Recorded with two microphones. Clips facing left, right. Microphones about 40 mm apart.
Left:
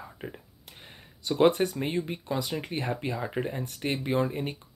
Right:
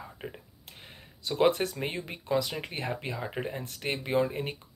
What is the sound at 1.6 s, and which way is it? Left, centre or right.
Speech, centre.